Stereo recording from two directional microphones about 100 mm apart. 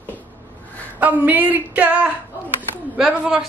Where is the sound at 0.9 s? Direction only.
15° right (ahead or behind).